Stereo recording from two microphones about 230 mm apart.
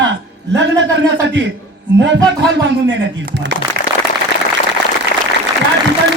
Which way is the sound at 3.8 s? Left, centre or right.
Right.